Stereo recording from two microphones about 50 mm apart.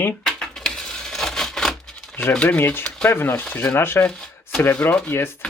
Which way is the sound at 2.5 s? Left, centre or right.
Left.